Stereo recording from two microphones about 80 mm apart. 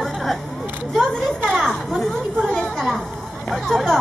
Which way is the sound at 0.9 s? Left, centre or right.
Centre.